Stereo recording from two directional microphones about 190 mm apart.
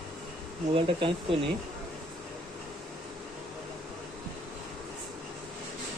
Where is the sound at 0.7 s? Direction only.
30° right (ahead or behind).